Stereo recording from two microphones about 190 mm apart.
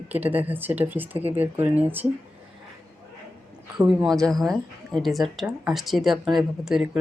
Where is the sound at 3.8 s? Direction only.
5° right (ahead or behind).